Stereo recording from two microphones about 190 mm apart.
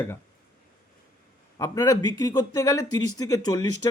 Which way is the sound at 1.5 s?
15° left (ahead or behind).